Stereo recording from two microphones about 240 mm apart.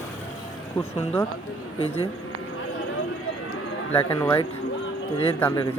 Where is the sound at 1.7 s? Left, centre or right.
Left.